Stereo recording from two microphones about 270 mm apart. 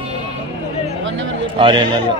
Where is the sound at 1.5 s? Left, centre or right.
Centre.